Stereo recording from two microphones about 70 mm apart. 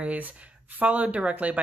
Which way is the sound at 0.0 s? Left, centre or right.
Right.